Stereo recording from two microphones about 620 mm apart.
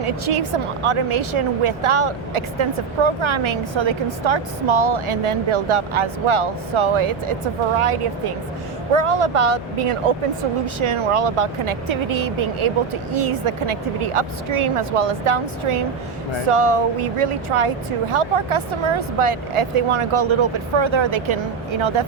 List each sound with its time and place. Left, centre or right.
0.3 s a woman's voice: right